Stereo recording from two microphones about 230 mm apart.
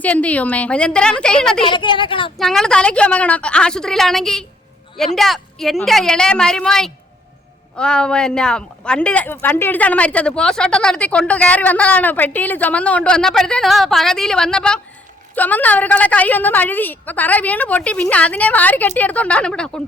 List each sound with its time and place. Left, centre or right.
0.0 s a woman's voice: centre
1.6 s a woman's voice: left
2.4 s a woman's voice: centre